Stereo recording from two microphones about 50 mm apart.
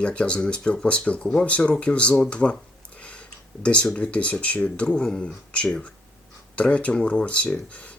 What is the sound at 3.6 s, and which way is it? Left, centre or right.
Speech, left.